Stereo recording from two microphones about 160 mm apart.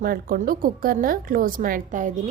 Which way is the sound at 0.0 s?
65° right (ahead or behind).